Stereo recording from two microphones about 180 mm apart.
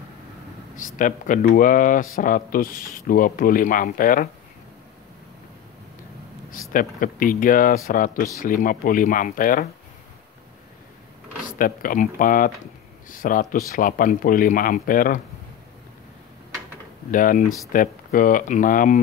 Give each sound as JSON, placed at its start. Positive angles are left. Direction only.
{"t": 0.7, "sound": "speech", "side_deg": 45}
{"t": 6.7, "sound": "speech", "side_deg": 50}
{"t": 11.4, "sound": "speech", "side_deg": 50}
{"t": 17.1, "sound": "speech", "side_deg": 50}